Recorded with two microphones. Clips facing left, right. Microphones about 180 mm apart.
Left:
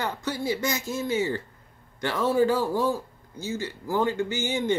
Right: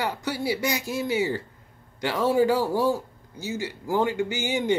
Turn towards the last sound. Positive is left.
turn(degrees=-15)  # may be behind; listen again after turning